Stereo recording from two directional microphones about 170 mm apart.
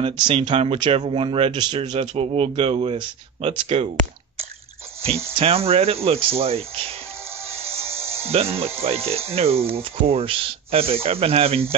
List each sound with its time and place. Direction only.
0.3 s speech: 35° right (ahead or behind)
7.6 s speech: 35° right (ahead or behind)